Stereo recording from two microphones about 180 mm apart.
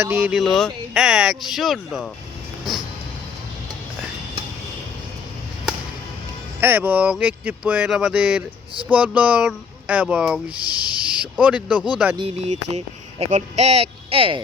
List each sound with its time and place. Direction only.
0.0 s speech: 10° right (ahead or behind)
6.6 s speech: 10° right (ahead or behind)
12.1 s speech: 35° right (ahead or behind)